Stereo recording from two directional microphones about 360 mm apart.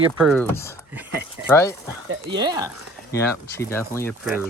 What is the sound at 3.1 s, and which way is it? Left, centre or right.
Speech, centre.